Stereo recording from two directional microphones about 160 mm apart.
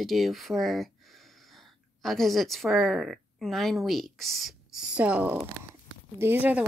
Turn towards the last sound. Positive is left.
turn(degrees=-10)  # may be behind; listen again after turning